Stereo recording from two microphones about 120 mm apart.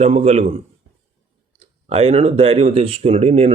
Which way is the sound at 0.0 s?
65° right (ahead or behind).